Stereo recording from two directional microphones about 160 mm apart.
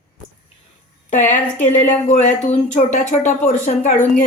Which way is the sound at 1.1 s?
50° left (ahead or behind).